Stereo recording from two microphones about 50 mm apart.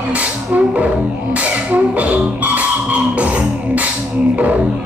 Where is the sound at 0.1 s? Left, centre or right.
Right.